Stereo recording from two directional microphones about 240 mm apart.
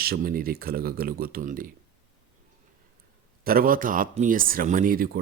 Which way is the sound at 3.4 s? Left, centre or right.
Right.